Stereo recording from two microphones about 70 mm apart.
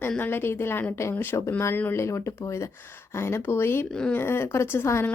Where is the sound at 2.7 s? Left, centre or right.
Left.